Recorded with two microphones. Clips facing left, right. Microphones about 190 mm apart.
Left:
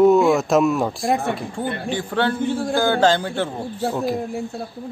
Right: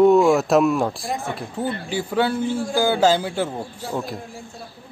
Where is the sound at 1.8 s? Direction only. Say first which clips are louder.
Even; 10° right (ahead or behind).